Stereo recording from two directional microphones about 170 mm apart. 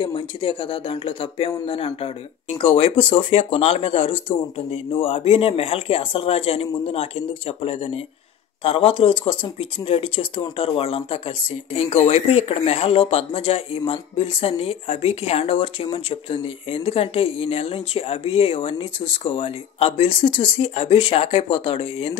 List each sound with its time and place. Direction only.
0.0 s speech: 30° left (ahead or behind)